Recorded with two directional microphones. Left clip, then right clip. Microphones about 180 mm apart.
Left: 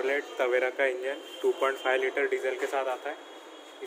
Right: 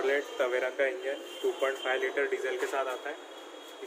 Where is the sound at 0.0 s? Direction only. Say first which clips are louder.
Left 1 dB; 55° left (ahead or behind).